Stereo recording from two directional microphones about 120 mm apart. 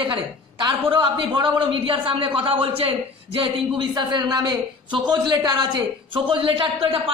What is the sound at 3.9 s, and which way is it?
A man's voice, 35° right (ahead or behind).